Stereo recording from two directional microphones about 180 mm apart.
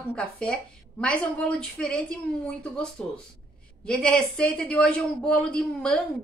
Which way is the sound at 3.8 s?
5° left (ahead or behind).